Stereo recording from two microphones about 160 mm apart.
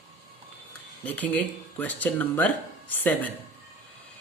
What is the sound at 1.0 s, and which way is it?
Speech, 10° left (ahead or behind).